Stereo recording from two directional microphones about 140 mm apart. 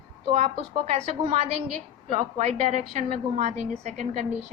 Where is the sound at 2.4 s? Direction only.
60° right (ahead or behind).